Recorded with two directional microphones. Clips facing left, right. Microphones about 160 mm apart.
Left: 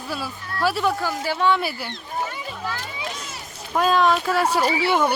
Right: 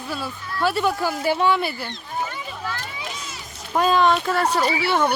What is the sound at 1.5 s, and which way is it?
Speech, 5° left (ahead or behind).